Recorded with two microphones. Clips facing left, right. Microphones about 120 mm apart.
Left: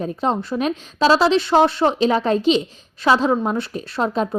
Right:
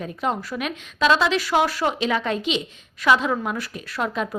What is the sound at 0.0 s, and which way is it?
A woman's voice, 30° left (ahead or behind).